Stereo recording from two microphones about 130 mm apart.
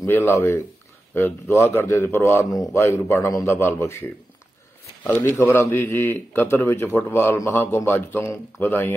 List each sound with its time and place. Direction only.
0.0 s a man's voice: 20° left (ahead or behind)